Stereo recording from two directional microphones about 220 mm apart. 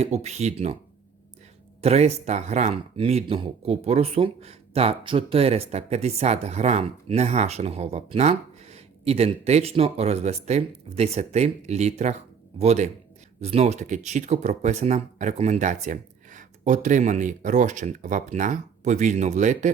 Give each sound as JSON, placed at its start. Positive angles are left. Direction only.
{"t": 0.0, "sound": "speech", "side_deg": -30}
{"t": 1.8, "sound": "speech", "side_deg": -30}